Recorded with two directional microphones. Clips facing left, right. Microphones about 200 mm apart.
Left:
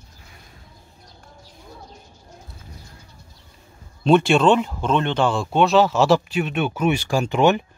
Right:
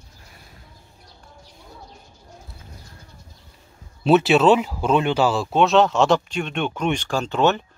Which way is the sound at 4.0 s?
5° right (ahead or behind).